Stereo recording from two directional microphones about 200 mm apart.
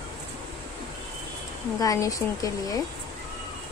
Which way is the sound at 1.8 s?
15° left (ahead or behind).